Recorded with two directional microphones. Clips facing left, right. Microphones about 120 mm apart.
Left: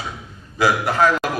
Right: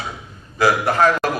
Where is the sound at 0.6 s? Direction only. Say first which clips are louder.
Right 1 dB; 50° right (ahead or behind).